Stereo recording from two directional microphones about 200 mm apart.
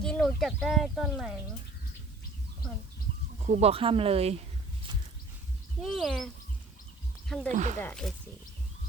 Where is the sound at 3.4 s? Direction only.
35° right (ahead or behind).